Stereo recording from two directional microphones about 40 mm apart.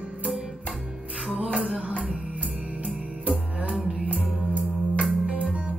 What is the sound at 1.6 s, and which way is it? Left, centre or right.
Music, right.